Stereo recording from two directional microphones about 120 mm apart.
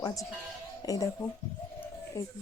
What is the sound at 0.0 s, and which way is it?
Speech, 30° left (ahead or behind).